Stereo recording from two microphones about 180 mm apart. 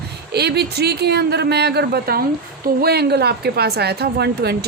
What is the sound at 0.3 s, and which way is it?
Speech, 65° right (ahead or behind).